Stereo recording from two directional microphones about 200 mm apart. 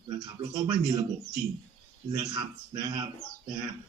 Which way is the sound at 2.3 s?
25° right (ahead or behind).